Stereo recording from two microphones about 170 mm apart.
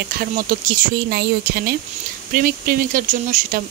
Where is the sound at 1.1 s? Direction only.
70° right (ahead or behind).